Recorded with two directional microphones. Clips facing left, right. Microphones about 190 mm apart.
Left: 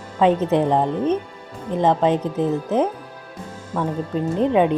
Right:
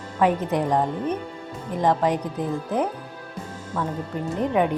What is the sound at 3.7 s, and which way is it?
Speech, 10° left (ahead or behind).